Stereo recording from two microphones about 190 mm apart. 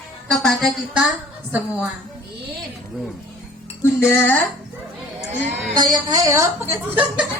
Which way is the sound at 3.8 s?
10° left (ahead or behind).